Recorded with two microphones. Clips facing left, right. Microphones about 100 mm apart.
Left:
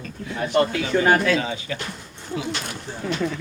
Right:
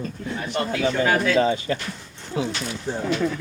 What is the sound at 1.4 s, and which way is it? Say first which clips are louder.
Speech: right 7 dB; 40° right (ahead or behind).